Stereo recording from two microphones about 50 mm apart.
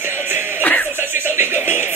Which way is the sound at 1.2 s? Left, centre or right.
Right.